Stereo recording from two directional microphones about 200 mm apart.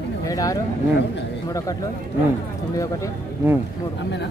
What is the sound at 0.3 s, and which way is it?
Speech, 15° left (ahead or behind).